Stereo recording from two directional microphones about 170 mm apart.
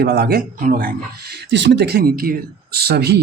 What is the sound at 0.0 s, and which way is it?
Speech, 70° right (ahead or behind).